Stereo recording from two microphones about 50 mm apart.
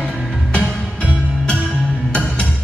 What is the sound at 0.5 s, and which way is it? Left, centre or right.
Music, right.